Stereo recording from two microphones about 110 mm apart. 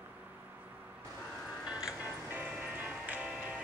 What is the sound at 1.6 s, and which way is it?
Music, 10° right (ahead or behind).